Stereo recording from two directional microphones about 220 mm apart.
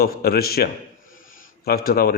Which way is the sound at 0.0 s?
45° left (ahead or behind).